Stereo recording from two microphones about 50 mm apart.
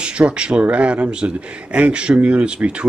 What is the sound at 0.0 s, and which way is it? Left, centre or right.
Speech, right.